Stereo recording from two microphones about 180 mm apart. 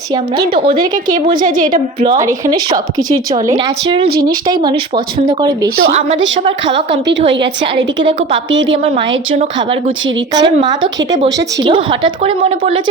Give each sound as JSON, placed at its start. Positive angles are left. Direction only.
{"t": 0.8, "sound": "a woman's voice", "side_deg": -50}
{"t": 2.0, "sound": "a woman's voice", "side_deg": -20}
{"t": 4.1, "sound": "speech", "side_deg": -55}
{"t": 4.4, "sound": "a woman's voice", "side_deg": -25}
{"t": 8.8, "sound": "a woman's voice", "side_deg": -30}